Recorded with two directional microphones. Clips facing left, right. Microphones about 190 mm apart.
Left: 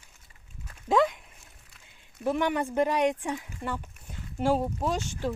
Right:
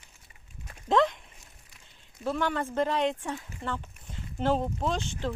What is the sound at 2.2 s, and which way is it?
Speech, 15° left (ahead or behind).